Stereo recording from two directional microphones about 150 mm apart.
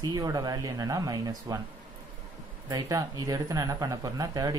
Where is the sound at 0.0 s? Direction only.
25° right (ahead or behind).